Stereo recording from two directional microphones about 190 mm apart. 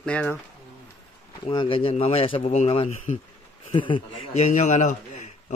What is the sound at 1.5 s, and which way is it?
Speech, 25° left (ahead or behind).